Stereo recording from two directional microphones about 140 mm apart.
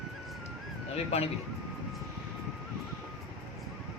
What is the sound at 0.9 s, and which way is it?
Speech, 50° left (ahead or behind).